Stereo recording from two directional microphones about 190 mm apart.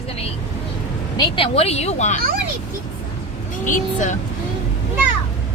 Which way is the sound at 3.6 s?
40° left (ahead or behind).